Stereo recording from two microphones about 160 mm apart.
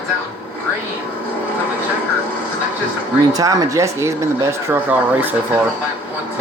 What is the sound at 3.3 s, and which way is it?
Speech, 20° right (ahead or behind).